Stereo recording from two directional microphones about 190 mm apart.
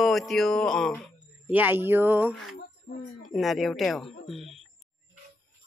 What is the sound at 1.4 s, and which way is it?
A man's voice, 10° right (ahead or behind).